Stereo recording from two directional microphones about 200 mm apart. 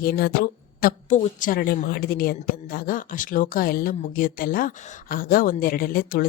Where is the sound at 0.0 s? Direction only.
50° left (ahead or behind).